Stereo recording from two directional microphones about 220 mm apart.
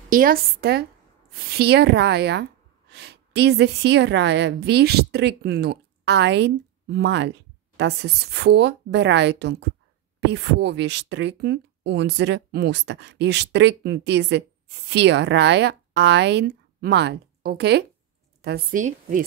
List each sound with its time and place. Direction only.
0.1 s a woman's voice: 40° right (ahead or behind)